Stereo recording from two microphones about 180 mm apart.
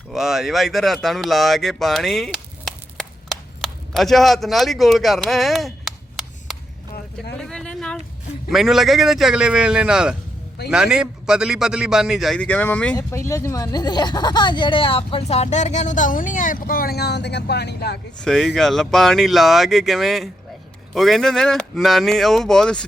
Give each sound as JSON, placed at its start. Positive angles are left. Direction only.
{"t": 0.1, "sound": "speech", "side_deg": 0}
{"t": 7.3, "sound": "a sound", "side_deg": 5}
{"t": 8.4, "sound": "a man's voice", "side_deg": 0}
{"t": 18.2, "sound": "a man's voice", "side_deg": 5}